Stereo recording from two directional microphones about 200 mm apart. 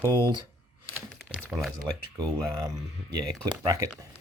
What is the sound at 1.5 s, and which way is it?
Speech, 15° right (ahead or behind).